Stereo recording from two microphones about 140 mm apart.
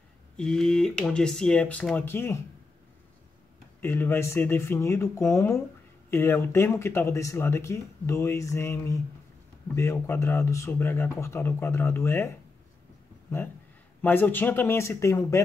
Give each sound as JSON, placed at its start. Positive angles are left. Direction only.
{"t": 0.4, "sound": "speech", "side_deg": 5}
{"t": 3.8, "sound": "speech", "side_deg": 15}
{"t": 14.0, "sound": "speech", "side_deg": 15}